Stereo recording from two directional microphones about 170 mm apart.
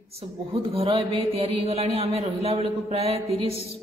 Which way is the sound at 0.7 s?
30° right (ahead or behind).